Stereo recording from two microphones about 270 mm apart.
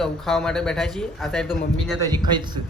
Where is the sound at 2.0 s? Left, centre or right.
Centre.